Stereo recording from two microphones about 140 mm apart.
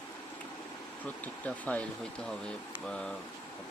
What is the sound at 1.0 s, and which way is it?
Speech, 10° left (ahead or behind).